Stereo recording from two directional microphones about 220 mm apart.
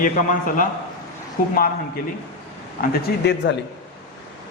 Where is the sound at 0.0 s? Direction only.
40° left (ahead or behind).